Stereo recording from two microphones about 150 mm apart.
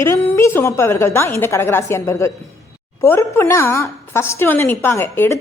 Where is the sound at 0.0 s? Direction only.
20° left (ahead or behind).